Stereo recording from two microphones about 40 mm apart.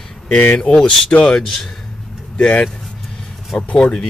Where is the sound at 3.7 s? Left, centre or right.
Centre.